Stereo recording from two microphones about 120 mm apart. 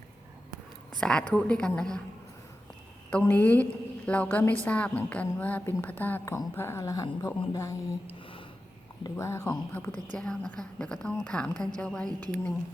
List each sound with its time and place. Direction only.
0.9 s a woman's voice: 5° left (ahead or behind)
3.1 s a woman's voice: 10° left (ahead or behind); by 7.9 s 30° left (ahead or behind)
8.0 s a sound: 50° left (ahead or behind)
9.0 s a woman's voice: 25° left (ahead or behind); by 12.5 s 5° left (ahead or behind)